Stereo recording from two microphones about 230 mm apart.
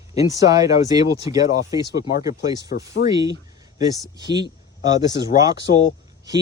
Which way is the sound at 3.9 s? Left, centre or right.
Centre.